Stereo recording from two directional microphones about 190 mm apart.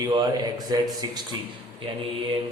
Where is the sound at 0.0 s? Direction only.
25° right (ahead or behind).